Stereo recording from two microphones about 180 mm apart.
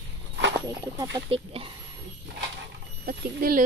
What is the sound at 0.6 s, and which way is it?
Speech, 20° right (ahead or behind).